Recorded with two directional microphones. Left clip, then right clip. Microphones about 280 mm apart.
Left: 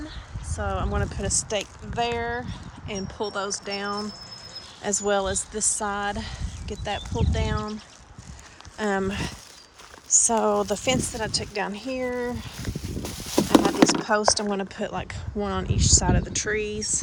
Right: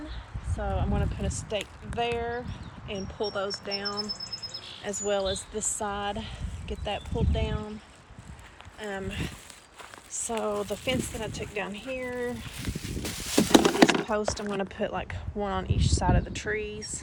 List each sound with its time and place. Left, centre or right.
0.6 s speech: centre
2.9 s speech: left
3.3 s speech: centre
8.8 s speech: centre
12.6 s a sound: left
14.0 s speech: centre